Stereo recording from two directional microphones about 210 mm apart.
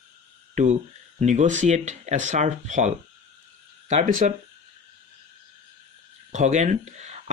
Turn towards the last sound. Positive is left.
turn(degrees=-35)  # may be behind; listen again after turning